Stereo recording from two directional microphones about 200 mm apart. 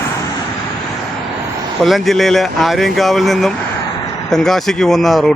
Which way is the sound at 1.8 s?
Centre (ahead or behind).